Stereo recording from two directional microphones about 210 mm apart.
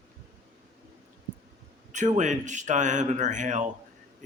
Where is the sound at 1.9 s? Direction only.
35° right (ahead or behind).